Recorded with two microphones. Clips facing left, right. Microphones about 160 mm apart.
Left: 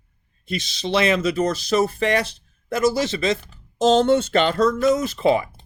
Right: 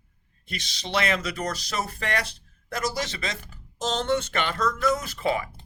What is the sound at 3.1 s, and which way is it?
Speech, 25° left (ahead or behind).